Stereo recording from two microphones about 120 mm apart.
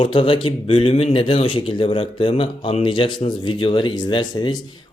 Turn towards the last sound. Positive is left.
turn(degrees=40)  # may be behind; listen again after turning